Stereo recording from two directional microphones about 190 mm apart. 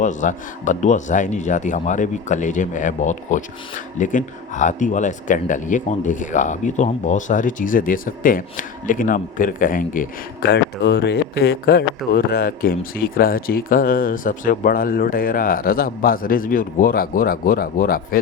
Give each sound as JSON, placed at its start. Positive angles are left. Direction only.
{"t": 0.0, "sound": "speech", "side_deg": 40}
{"t": 10.5, "sound": "speech", "side_deg": 65}